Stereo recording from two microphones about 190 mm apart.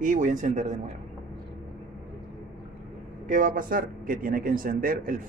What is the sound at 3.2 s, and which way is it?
Speech, 40° right (ahead or behind).